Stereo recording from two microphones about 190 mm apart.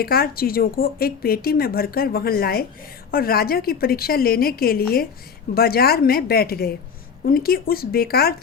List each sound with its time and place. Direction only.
0.0 s speech: 50° left (ahead or behind)